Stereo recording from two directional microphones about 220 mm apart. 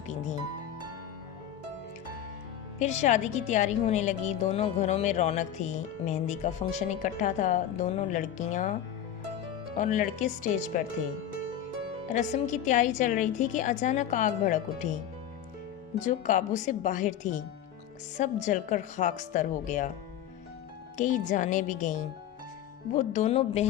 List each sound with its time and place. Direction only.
2.7 s a woman's voice: 30° left (ahead or behind)
9.7 s a woman's voice: 35° left (ahead or behind)
12.0 s a woman's voice: 35° left (ahead or behind)
16.0 s a woman's voice: 35° left (ahead or behind)
21.0 s a woman's voice: 35° left (ahead or behind)